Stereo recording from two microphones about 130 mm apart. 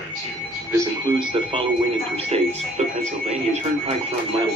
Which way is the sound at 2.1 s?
55° right (ahead or behind).